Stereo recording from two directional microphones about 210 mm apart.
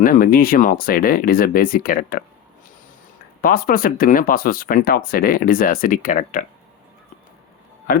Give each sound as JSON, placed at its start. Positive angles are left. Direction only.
{"t": 0.0, "sound": "speech", "side_deg": 40}
{"t": 3.4, "sound": "speech", "side_deg": 45}